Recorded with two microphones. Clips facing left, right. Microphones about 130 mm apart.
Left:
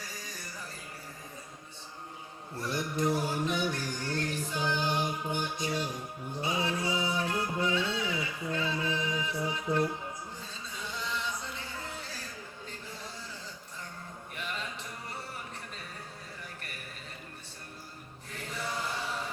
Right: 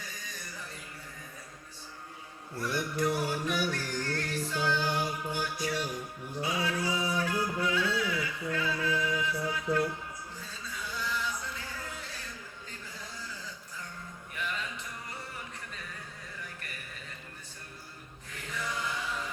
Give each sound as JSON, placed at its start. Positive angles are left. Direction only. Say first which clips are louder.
{"t": 2.6, "sound": "music", "louder": "right 1 dB", "side_deg": 25}
{"t": 18.5, "sound": "chant", "louder": "even", "side_deg": 30}